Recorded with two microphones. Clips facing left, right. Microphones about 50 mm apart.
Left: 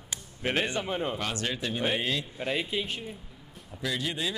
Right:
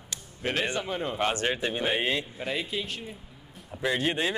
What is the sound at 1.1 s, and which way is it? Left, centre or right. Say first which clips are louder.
Speech: right 5 dB; right.